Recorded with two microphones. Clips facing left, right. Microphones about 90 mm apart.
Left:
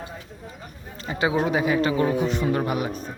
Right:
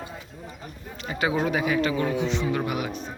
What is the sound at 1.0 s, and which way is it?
A man's voice, 25° left (ahead or behind).